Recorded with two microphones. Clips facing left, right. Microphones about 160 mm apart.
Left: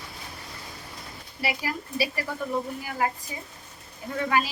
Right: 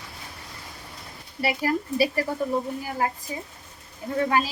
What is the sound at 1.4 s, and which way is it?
Speech, 45° right (ahead or behind).